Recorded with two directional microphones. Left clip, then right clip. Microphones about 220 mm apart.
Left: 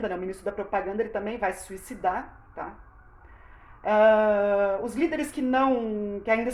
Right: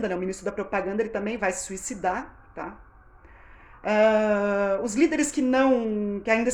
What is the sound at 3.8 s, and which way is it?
Speech, 50° right (ahead or behind).